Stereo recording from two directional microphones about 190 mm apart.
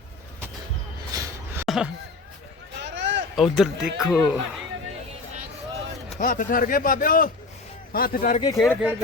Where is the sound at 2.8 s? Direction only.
70° right (ahead or behind).